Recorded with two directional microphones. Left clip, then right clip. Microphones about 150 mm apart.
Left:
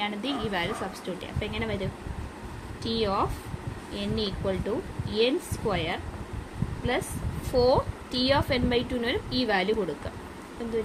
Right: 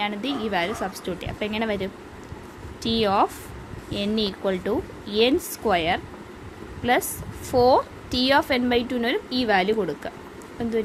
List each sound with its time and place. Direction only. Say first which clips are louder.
0.0 s a woman's voice: right 3 dB; 30° right (ahead or behind)